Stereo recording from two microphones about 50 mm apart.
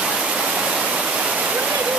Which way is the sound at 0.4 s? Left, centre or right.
Centre.